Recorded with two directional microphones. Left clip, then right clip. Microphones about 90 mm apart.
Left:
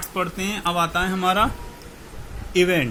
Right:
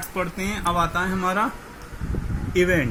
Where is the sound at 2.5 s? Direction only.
90° left.